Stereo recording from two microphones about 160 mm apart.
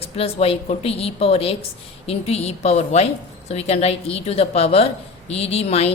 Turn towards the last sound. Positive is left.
turn(degrees=40)  # may be behind; listen again after turning